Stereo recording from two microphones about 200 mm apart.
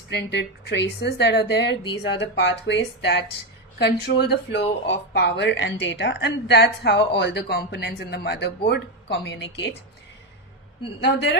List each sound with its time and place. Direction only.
0.1 s a woman's voice: 55° left (ahead or behind)
11.0 s a woman's voice: 60° left (ahead or behind)